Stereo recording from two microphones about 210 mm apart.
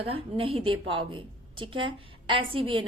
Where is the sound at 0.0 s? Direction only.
25° right (ahead or behind).